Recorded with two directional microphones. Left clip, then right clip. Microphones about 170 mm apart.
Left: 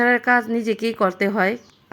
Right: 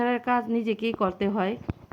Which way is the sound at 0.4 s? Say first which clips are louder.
Left 5 dB; 35° left (ahead or behind).